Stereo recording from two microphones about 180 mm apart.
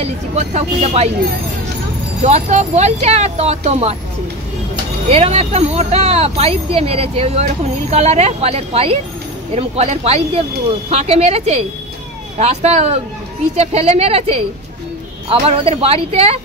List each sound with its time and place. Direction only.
0.0 s speech: 35° right (ahead or behind)
2.2 s speech: 40° right (ahead or behind)
5.1 s speech: 35° right (ahead or behind)